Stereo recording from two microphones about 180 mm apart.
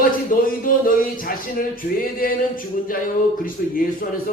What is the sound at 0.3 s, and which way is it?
Speech, 50° left (ahead or behind).